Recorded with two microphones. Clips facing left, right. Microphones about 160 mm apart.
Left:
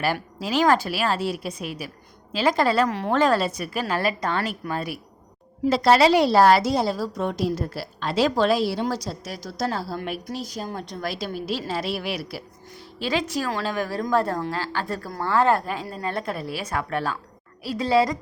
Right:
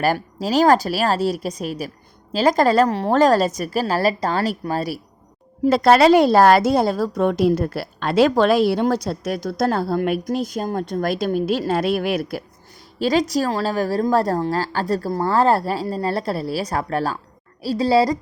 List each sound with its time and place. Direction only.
0.0 s a woman's voice: 40° right (ahead or behind)
5.6 s a woman's voice: 55° right (ahead or behind); by 18.2 s 35° right (ahead or behind)